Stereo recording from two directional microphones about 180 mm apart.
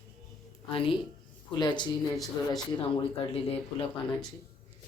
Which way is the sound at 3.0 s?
30° left (ahead or behind).